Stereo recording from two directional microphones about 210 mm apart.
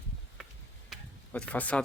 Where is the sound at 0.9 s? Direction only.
5° left (ahead or behind).